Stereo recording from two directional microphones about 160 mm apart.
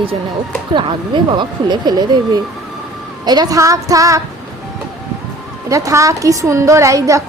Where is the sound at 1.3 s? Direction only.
25° right (ahead or behind).